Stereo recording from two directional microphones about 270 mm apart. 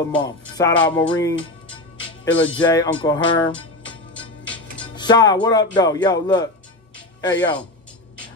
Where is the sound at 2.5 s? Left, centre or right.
Centre.